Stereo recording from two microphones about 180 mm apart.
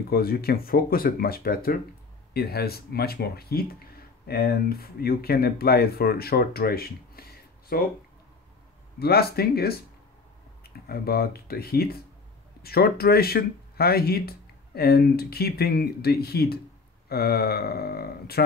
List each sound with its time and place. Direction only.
0.1 s speech: 60° left (ahead or behind)
9.0 s speech: 60° left (ahead or behind)